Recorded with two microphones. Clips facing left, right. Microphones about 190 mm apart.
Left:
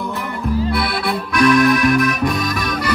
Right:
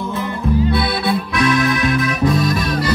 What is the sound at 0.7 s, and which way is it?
Accordion, 20° right (ahead or behind).